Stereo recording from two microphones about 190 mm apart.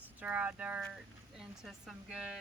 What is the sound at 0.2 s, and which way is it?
Speech, 10° right (ahead or behind).